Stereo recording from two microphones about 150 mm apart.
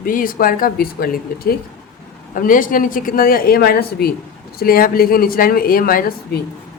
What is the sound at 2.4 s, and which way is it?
Speech, 65° left (ahead or behind).